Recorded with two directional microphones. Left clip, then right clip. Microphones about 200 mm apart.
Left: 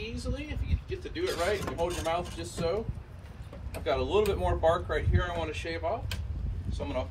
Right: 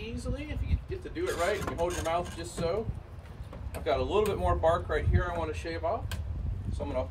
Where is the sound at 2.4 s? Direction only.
Centre (ahead or behind).